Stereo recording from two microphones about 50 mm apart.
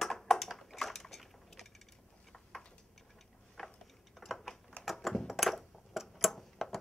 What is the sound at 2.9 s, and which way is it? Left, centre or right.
Chewing, centre.